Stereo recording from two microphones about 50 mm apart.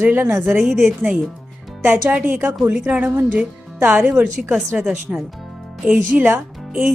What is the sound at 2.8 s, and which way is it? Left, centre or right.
Speech, right.